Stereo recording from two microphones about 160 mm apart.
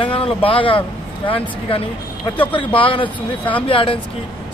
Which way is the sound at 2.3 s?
10° left (ahead or behind).